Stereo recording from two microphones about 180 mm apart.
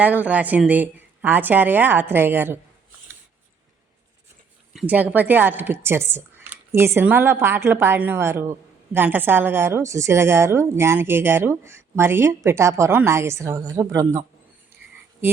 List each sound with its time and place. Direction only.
0.0 s speech: 10° right (ahead or behind)
4.7 s speech: 5° right (ahead or behind)